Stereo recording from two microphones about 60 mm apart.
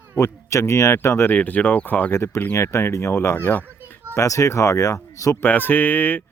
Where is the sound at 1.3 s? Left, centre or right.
Left.